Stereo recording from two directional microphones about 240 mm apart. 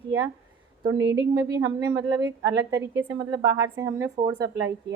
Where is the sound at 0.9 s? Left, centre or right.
Right.